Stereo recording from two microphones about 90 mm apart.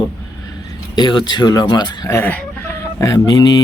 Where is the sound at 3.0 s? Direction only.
35° left (ahead or behind).